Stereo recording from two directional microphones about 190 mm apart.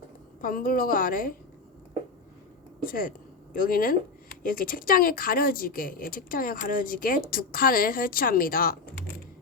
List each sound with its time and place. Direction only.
0.4 s speech: 50° left (ahead or behind)
2.8 s speech: 50° left (ahead or behind)